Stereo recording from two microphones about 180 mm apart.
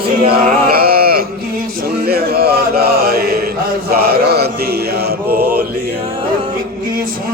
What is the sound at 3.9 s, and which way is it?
Mantra, 60° right (ahead or behind).